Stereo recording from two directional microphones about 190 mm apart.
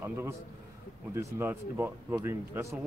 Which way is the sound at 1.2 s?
10° right (ahead or behind).